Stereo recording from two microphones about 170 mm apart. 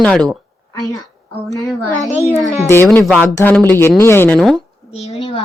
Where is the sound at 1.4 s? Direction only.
20° left (ahead or behind).